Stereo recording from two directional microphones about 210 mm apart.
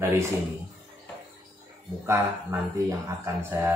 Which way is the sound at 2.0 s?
15° right (ahead or behind).